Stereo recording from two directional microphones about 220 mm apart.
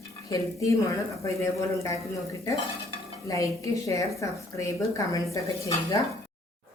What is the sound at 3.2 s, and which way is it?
A woman's voice, 15° left (ahead or behind).